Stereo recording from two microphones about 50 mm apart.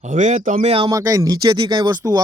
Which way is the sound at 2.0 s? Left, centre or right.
Right.